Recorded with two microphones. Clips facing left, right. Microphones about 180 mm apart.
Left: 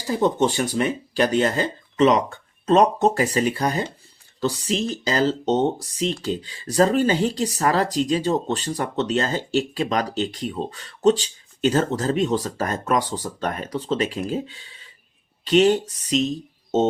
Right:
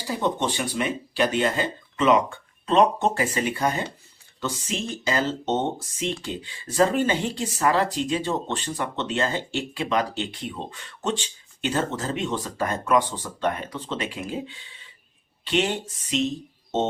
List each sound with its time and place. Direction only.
0.2 s speech: 45° left (ahead or behind)